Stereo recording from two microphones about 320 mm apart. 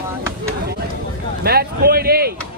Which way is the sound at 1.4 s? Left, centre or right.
Right.